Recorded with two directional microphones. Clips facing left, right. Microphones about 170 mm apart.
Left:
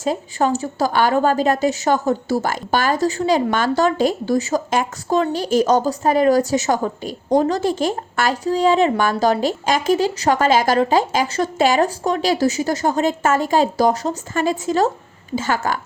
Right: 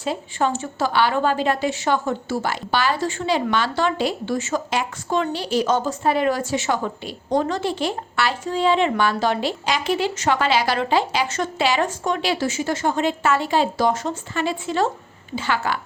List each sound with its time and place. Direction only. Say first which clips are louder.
0.0 s a woman's voice: left 3 dB; 40° left (ahead or behind)